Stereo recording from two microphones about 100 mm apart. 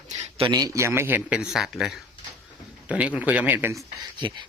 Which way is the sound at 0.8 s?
25° right (ahead or behind).